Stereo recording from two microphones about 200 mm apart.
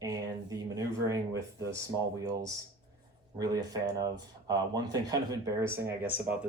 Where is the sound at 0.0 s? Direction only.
20° right (ahead or behind).